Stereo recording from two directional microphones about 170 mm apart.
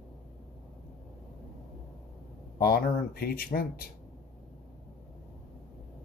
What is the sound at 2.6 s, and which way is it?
Speech, 60° left (ahead or behind).